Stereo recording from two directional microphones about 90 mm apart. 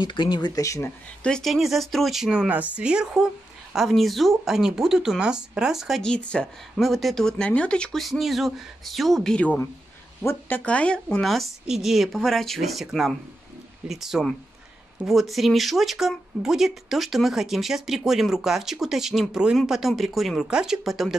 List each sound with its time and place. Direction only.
0.0 s speech: 60° left (ahead or behind)
0.5 s speech: 35° left (ahead or behind)
1.2 s speech: 5° left (ahead or behind)
6.0 s speech: 10° left (ahead or behind)
6.8 s speech: centre (ahead or behind)
8.0 s speech: centre (ahead or behind)
10.6 s speech: 15° left (ahead or behind); by 21.2 s centre (ahead or behind)